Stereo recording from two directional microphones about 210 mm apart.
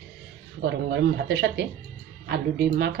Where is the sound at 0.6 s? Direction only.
55° right (ahead or behind).